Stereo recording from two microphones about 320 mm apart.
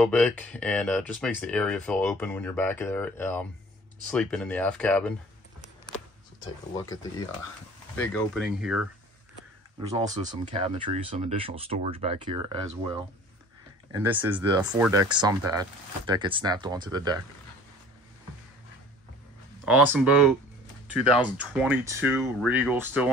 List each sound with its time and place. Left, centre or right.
0.0 s speech: centre
6.7 s speech: centre
9.8 s speech: centre
14.0 s speech: centre
19.6 s speech: centre
21.5 s speech: centre